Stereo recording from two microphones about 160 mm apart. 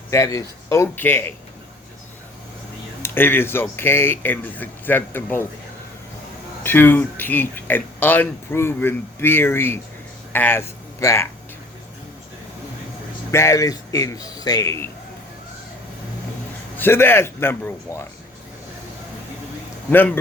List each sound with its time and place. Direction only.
0.1 s speech: 20° left (ahead or behind)
3.0 s speech: 15° left (ahead or behind)
6.6 s speech: 15° left (ahead or behind)
13.3 s speech: 20° left (ahead or behind)
16.7 s speech: 15° left (ahead or behind)
19.9 s speech: 10° left (ahead or behind)